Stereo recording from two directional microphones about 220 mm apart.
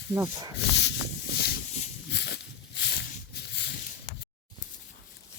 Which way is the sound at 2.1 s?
50° left (ahead or behind).